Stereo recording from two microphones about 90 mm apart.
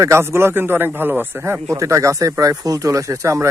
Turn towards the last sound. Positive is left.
turn(degrees=-35)  # may be behind; listen again after turning